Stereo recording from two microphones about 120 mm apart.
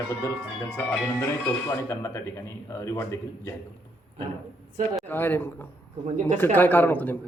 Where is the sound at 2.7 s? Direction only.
20° left (ahead or behind).